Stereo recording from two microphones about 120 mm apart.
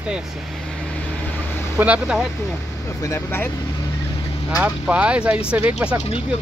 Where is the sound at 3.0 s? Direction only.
20° left (ahead or behind).